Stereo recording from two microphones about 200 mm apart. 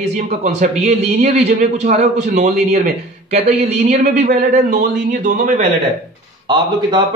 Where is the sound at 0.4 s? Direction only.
35° right (ahead or behind).